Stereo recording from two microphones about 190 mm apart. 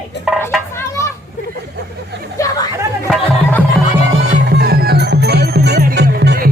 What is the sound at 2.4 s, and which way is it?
Chatter, 15° left (ahead or behind).